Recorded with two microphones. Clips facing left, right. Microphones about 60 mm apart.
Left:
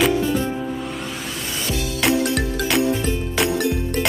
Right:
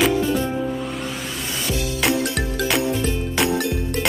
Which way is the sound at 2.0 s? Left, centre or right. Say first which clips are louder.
Left 3 dB; centre.